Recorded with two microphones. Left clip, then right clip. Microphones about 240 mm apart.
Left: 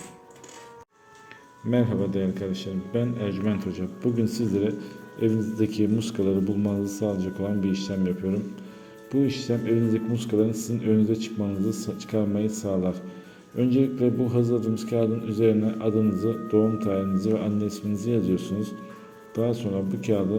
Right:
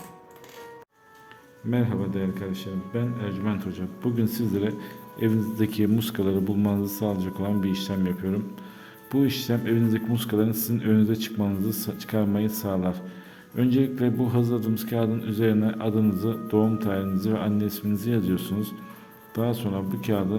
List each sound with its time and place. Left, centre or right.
1.7 s a man's voice: centre